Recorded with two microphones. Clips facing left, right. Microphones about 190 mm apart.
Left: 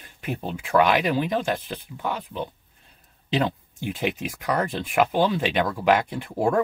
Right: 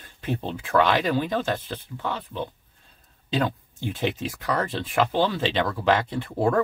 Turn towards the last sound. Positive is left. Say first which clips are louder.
# even
turn(degrees=15)  # may be behind; listen again after turning